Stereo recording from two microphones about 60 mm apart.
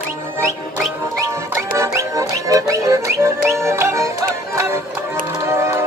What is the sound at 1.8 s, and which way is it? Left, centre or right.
Music, right.